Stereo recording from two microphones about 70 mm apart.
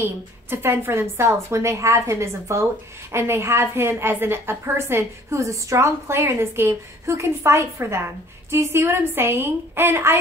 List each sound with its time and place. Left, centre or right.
0.0 s a woman's voice: right